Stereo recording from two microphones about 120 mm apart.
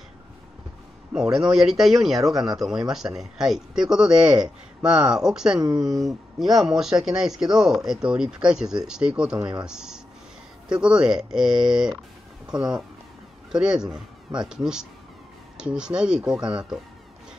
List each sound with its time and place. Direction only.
1.1 s speech: 5° right (ahead or behind)
5.6 s speech: 30° right (ahead or behind)
5.9 s speech: centre (ahead or behind)